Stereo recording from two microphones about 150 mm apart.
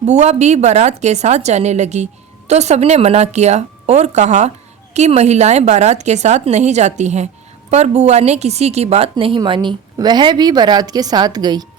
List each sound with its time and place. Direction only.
0.0 s a woman's voice: 50° right (ahead or behind); by 11.6 s 25° right (ahead or behind)